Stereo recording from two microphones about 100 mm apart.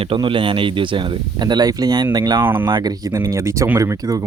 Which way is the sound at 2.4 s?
20° right (ahead or behind).